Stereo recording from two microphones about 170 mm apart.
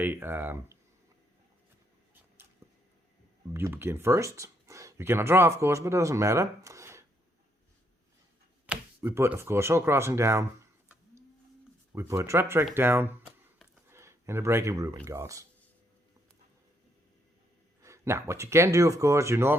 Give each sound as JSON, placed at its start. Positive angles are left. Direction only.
{"t": 0.0, "sound": "speech", "side_deg": -10}
{"t": 2.6, "sound": "a sound", "side_deg": -15}
{"t": 3.5, "sound": "speech", "side_deg": -15}
{"t": 8.6, "sound": "speech", "side_deg": -10}
{"t": 11.9, "sound": "speech", "side_deg": -15}
{"t": 13.2, "sound": "a sound", "side_deg": -10}
{"t": 17.8, "sound": "speech", "side_deg": -15}